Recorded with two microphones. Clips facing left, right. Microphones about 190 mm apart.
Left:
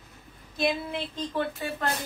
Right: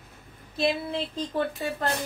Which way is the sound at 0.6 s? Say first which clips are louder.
Right 2 dB; 30° right (ahead or behind).